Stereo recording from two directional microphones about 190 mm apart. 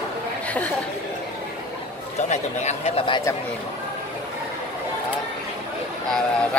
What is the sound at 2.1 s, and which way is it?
Speech, 35° left (ahead or behind).